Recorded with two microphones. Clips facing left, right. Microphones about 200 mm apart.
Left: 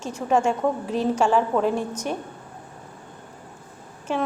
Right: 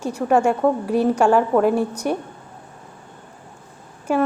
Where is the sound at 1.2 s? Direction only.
55° right (ahead or behind).